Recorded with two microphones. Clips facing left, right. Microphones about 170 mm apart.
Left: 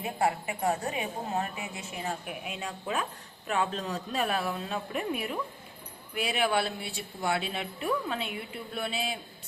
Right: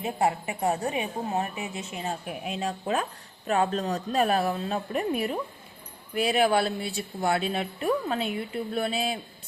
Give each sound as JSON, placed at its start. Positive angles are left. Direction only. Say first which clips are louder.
{"t": 0.0, "sound": "a woman's voice", "louder": "right 3 dB", "side_deg": -25}
{"t": 2.4, "sound": "speech", "louder": "right 6 dB", "side_deg": -35}